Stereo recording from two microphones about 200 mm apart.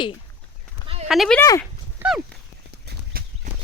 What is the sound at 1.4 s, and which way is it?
Speech, 15° left (ahead or behind).